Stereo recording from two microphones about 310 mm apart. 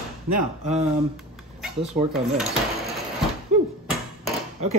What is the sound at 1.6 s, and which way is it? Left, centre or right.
Speech, centre.